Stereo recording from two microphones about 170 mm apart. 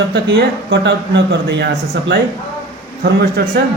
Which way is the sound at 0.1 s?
80° right.